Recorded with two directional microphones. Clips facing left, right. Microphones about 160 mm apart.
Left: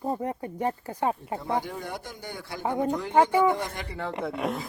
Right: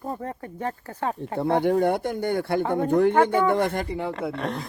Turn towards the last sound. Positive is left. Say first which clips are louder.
# even
turn(degrees=5)  # may be behind; listen again after turning